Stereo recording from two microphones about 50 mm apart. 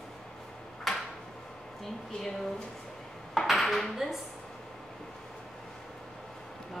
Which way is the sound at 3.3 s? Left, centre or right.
Centre.